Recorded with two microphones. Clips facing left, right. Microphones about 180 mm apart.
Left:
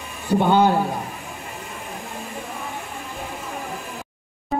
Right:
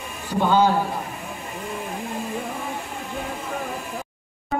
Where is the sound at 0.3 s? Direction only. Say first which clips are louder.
Left 2 dB; 60° left (ahead or behind).